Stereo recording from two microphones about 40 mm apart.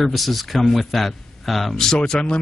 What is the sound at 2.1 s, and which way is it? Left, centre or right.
Speech, centre.